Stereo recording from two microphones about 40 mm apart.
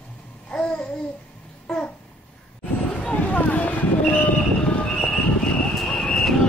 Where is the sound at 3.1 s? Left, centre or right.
Left.